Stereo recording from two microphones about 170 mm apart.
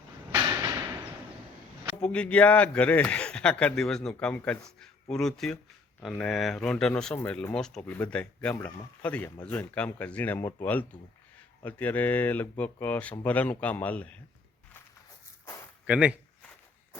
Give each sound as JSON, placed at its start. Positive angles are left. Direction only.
{"t": 0.3, "sound": "a sound", "side_deg": -20}
{"t": 2.0, "sound": "speech", "side_deg": 5}
{"t": 15.9, "sound": "speech", "side_deg": -5}